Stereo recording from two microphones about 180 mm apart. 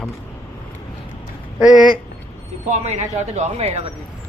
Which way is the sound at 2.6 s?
40° right (ahead or behind).